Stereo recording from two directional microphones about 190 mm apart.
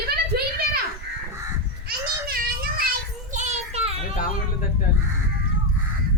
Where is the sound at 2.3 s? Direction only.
50° right (ahead or behind).